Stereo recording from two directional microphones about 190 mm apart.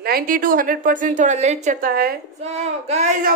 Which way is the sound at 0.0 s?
50° right (ahead or behind).